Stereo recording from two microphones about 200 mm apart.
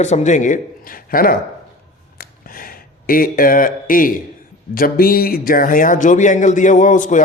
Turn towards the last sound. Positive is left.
turn(degrees=40)  # may be behind; listen again after turning